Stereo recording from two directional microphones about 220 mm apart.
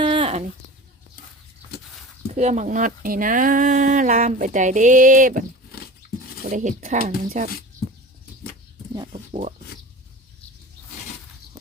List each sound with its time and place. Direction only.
0.0 s a sound: 25° right (ahead or behind)
2.3 s speech: 35° right (ahead or behind)
7.3 s speech: 45° right (ahead or behind)
9.0 s speech: 25° right (ahead or behind)